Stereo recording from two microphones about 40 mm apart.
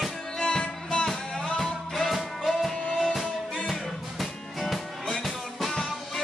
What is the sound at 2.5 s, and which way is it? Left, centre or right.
Music, centre.